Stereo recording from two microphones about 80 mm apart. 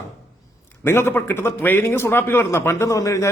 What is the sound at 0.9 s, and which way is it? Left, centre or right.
A man's voice, left.